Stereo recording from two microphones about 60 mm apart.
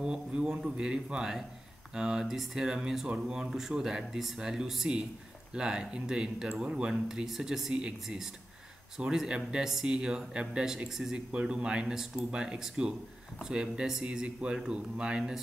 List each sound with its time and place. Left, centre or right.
0.0 s speech: centre